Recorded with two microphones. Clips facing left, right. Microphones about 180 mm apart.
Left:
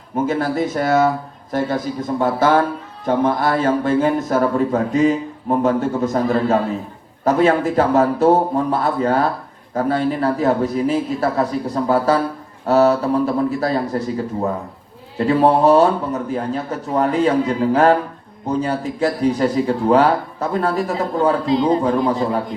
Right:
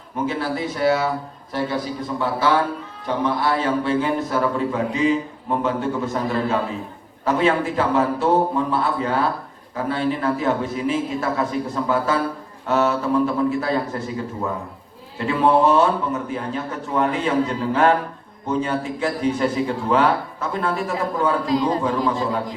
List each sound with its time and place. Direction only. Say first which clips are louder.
0.3 s a man's voice: left 5 dB; 45° left (ahead or behind)
21.4 s a man's voice: left 4 dB; 25° left (ahead or behind)
21.8 s speech: left 4 dB; 40° left (ahead or behind)